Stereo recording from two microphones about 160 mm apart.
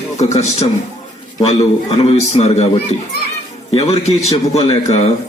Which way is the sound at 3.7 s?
40° left (ahead or behind).